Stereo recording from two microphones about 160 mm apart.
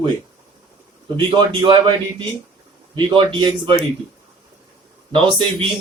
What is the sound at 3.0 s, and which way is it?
Speech, 30° right (ahead or behind).